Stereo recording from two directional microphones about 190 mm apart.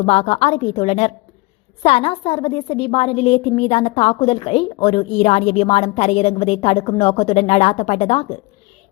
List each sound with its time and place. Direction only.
0.0 s a woman's voice: 30° left (ahead or behind)